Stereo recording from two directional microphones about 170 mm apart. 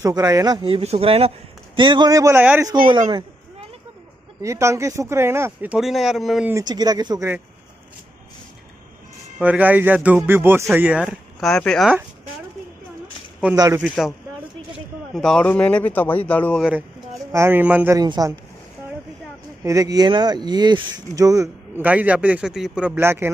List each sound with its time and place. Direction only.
0.0 s speech: 20° right (ahead or behind)
2.9 s speech: 25° right (ahead or behind)
4.4 s speech: 15° right (ahead or behind)
6.5 s speech: 25° right (ahead or behind)
9.4 s speech: 10° right (ahead or behind)
13.6 s speech: 20° right (ahead or behind)
13.8 s speech: centre (ahead or behind)
15.1 s a man's voice: 5° left (ahead or behind)
17.3 s speech: 15° right (ahead or behind)
17.9 s speech: 25° right (ahead or behind)
19.6 s speech: 20° right (ahead or behind)